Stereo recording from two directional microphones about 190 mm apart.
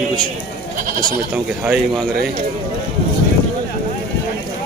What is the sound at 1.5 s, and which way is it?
Speech, 5° right (ahead or behind).